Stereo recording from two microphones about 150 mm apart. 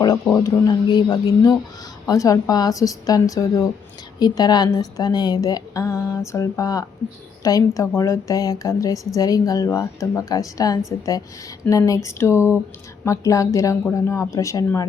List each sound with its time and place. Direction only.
0.3 s a woman's voice: 25° left (ahead or behind)